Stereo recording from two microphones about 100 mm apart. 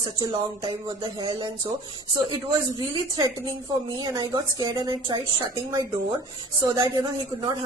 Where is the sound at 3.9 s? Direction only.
45° right (ahead or behind).